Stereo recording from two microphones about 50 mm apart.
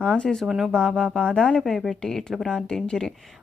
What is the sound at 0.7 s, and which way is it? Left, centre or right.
A woman's voice, centre.